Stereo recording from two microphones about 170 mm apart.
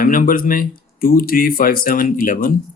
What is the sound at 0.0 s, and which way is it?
Speech, 55° left (ahead or behind).